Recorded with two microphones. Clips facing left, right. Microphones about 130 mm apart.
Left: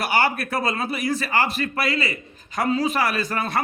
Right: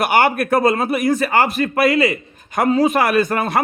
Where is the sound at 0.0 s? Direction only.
55° right (ahead or behind).